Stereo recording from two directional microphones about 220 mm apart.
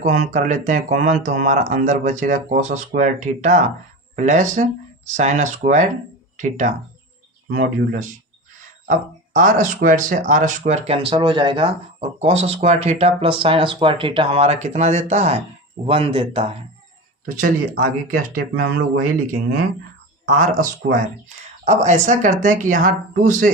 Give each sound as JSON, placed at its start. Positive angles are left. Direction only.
{"t": 0.0, "sound": "speech", "side_deg": -35}
{"t": 17.2, "sound": "speech", "side_deg": -40}
{"t": 20.2, "sound": "speech", "side_deg": -35}